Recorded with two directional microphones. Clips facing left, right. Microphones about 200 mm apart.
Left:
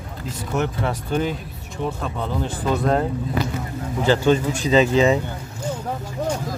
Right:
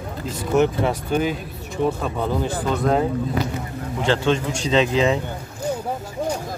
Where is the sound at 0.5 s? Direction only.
20° right (ahead or behind).